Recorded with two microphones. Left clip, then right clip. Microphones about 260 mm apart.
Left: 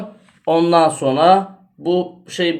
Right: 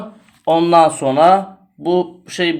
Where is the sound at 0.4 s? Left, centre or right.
Centre.